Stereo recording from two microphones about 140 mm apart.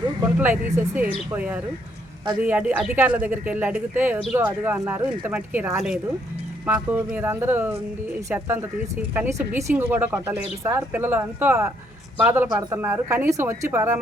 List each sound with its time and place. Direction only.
0.3 s speech: 15° right (ahead or behind)